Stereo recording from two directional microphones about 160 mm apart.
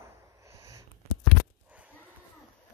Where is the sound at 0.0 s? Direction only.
20° right (ahead or behind).